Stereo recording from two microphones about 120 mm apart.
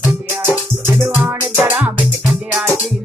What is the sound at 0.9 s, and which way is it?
Music, 20° right (ahead or behind).